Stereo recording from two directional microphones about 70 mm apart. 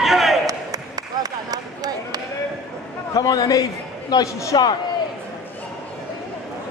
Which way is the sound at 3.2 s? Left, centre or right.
Left.